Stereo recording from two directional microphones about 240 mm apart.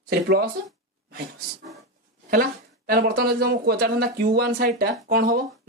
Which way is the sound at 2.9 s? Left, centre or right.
Right.